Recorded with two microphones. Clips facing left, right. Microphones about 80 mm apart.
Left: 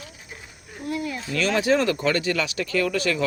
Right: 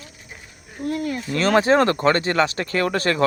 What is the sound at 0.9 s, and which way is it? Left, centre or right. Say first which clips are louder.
Speech: right 4 dB; right.